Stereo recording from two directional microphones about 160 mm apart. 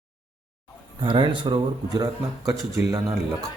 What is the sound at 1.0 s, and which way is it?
Speech, 30° right (ahead or behind).